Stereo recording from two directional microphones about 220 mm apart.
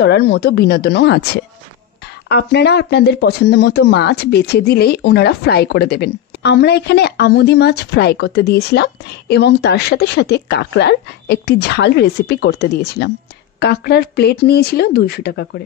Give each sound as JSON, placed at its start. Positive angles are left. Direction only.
{"t": 0.0, "sound": "speech", "side_deg": 50}